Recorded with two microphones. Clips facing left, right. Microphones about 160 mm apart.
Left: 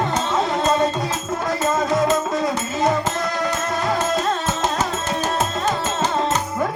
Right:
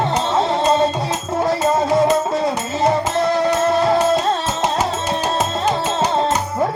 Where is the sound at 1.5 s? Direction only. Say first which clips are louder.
Right 3 dB; 30° right (ahead or behind).